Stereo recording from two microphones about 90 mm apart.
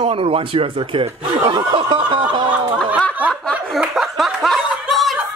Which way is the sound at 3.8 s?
Centre (ahead or behind).